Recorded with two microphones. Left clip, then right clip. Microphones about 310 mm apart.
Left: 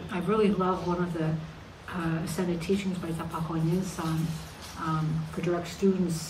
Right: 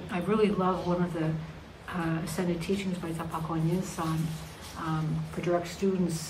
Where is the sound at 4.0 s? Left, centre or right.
Centre.